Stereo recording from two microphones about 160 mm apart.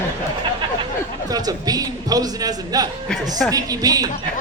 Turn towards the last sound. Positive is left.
turn(degrees=-25)  # may be behind; listen again after turning